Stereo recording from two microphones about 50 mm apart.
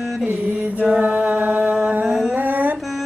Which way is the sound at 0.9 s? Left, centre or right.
Right.